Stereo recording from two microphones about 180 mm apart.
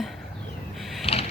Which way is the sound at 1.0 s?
35° left (ahead or behind).